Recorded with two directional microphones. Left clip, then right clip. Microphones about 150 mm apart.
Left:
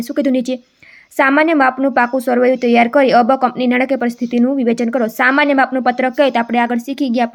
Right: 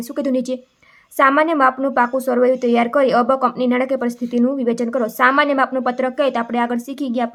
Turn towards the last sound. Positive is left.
turn(degrees=25)  # may be behind; listen again after turning